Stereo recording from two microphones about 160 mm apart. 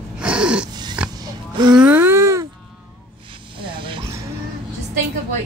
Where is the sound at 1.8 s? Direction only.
10° right (ahead or behind).